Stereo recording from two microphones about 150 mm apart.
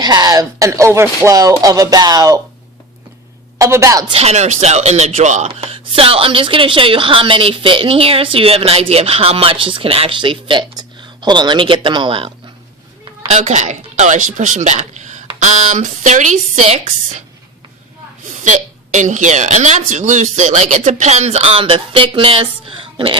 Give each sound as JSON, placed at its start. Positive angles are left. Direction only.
{"t": 0.0, "sound": "speech", "side_deg": -25}
{"t": 3.6, "sound": "speech", "side_deg": -20}
{"t": 4.1, "sound": "speech", "side_deg": -45}
{"t": 13.2, "sound": "speech", "side_deg": -50}
{"t": 18.3, "sound": "speech", "side_deg": -55}